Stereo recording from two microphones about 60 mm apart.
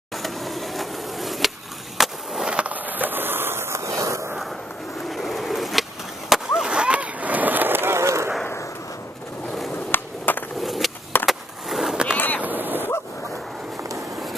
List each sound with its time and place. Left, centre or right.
0.1 s a sound: centre
2.0 s skateboard: centre; by 4.3 s right
5.0 s skateboard: centre; by 8.3 s right
9.8 s skateboard: left
10.6 s skateboard: centre
12.4 s boat: right